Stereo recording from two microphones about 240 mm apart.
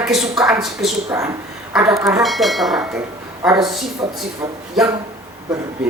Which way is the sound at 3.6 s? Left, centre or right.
Centre.